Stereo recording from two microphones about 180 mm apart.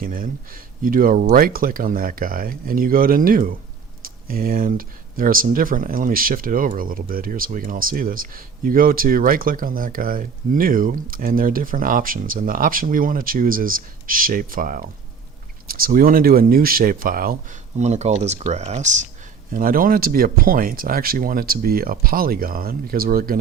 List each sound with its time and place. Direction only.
0.0 s speech: 50° right (ahead or behind)
19.5 s speech: 50° right (ahead or behind)